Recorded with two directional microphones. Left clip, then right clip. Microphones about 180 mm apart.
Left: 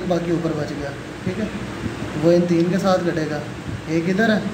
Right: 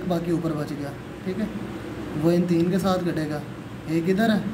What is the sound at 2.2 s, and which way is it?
Speech, 20° right (ahead or behind).